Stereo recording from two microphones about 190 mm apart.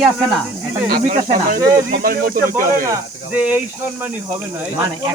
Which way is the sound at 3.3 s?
5° right (ahead or behind).